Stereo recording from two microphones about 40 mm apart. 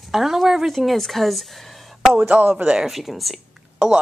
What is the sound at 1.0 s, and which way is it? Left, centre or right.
Speech, centre.